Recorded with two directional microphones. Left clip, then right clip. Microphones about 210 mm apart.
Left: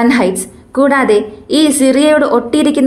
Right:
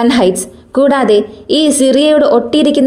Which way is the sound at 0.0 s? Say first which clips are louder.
Right 1 dB; 35° right (ahead or behind).